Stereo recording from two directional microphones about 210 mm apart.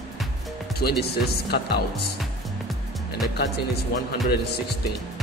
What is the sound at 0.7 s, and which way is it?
Speech, 50° left (ahead or behind).